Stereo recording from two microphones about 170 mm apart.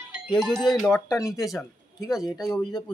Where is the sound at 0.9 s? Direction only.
20° left (ahead or behind).